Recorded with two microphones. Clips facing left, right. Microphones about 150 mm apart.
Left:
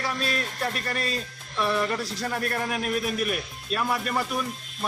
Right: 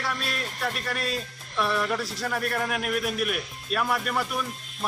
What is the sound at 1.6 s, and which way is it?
A man's voice, centre (ahead or behind).